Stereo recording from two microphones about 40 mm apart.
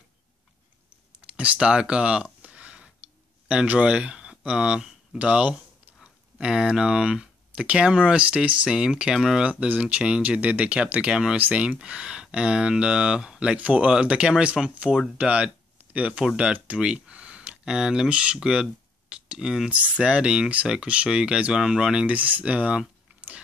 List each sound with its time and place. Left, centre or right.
1.2 s a sound: right
3.6 s speech: right
6.3 s speech: centre; by 8.6 s right
8.6 s speech: right
11.3 s speech: right
11.8 s speech: right
13.6 s speech: right
13.8 s speech: centre
17.5 s speech: centre
19.7 s speech: right
22.0 s speech: right